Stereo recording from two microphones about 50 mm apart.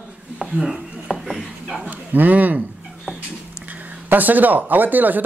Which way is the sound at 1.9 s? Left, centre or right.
Right.